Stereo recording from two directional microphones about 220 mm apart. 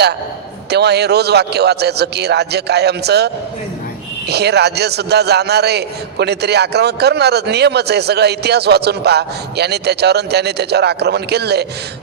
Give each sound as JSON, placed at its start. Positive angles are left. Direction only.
{"t": 0.7, "sound": "a man's voice", "side_deg": -50}